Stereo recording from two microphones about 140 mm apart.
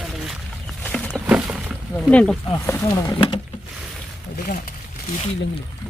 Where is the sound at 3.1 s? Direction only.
40° left (ahead or behind).